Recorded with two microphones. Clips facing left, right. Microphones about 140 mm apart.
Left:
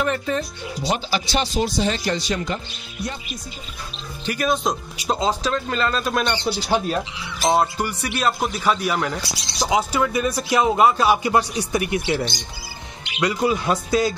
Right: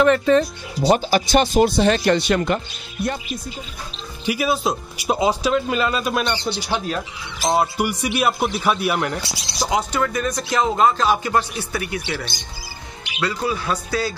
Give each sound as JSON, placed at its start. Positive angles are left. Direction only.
{"t": 0.0, "sound": "speech", "side_deg": -90}
{"t": 0.8, "sound": "speech", "side_deg": -45}
{"t": 4.3, "sound": "a man's voice", "side_deg": -5}
{"t": 13.2, "sound": "a man's voice", "side_deg": 15}